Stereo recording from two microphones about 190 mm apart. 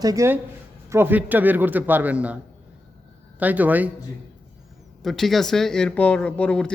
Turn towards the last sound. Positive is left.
turn(degrees=5)  # may be behind; listen again after turning